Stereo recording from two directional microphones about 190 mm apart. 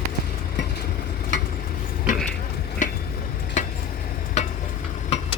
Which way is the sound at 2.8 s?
40° left (ahead or behind).